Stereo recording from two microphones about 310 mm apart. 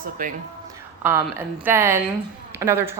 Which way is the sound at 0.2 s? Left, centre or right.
Right.